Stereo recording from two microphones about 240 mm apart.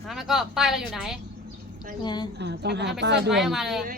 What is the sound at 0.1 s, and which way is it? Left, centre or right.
Speech, centre.